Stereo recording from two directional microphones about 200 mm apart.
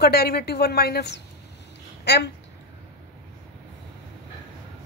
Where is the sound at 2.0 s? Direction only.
55° left (ahead or behind).